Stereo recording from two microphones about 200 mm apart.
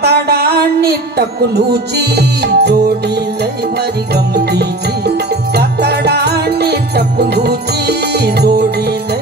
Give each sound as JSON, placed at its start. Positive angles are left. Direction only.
{"t": 0.0, "sound": "music", "side_deg": -55}
{"t": 4.1, "sound": "music", "side_deg": -55}